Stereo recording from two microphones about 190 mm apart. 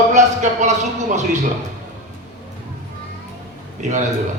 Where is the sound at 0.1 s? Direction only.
40° right (ahead or behind).